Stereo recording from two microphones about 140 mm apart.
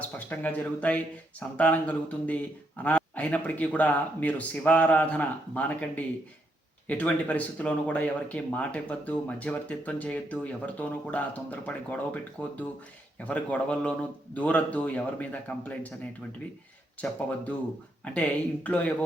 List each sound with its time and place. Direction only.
0.3 s speech: 10° left (ahead or behind)
18.0 s speech: 10° left (ahead or behind)